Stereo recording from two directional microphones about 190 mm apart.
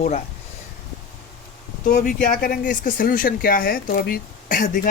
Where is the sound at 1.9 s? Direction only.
45° left (ahead or behind).